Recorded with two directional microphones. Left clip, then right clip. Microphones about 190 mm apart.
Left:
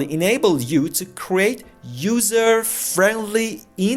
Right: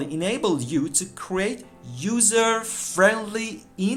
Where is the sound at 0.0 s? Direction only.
35° left (ahead or behind).